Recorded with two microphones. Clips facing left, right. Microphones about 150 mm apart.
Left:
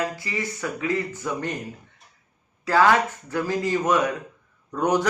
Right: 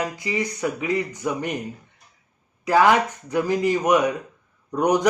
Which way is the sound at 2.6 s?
15° right (ahead or behind).